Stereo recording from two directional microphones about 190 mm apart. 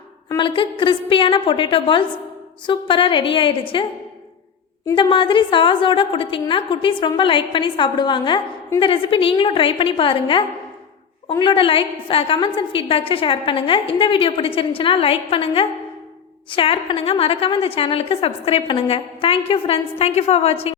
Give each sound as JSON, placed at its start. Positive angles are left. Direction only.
{"t": 0.3, "sound": "a woman's voice", "side_deg": 25}
{"t": 4.9, "sound": "a woman's voice", "side_deg": 25}